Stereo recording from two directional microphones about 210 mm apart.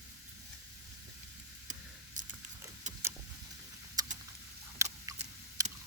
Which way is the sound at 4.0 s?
15° right (ahead or behind).